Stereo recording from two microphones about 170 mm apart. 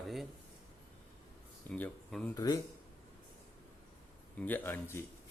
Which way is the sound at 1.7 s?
10° left (ahead or behind).